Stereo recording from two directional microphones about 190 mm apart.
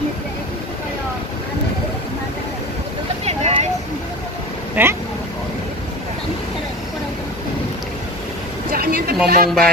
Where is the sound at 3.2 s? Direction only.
30° right (ahead or behind).